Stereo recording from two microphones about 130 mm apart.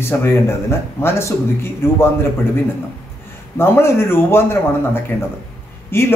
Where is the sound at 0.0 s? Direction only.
20° left (ahead or behind).